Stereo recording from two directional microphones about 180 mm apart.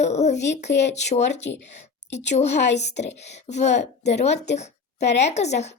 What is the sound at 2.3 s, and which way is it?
A woman's voice, 40° left (ahead or behind).